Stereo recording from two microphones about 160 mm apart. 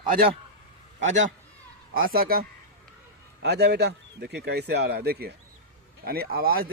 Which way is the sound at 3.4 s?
90° right.